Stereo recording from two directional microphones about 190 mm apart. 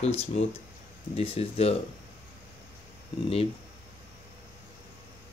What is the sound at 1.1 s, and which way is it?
Speech, 30° left (ahead or behind).